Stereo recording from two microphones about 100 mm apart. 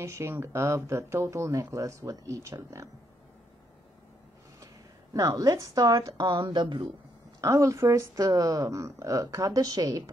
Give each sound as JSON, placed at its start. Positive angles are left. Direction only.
{"t": 0.0, "sound": "speech", "side_deg": -25}
{"t": 5.1, "sound": "speech", "side_deg": -35}
{"t": 6.4, "sound": "speech", "side_deg": -55}
{"t": 7.3, "sound": "speech", "side_deg": -30}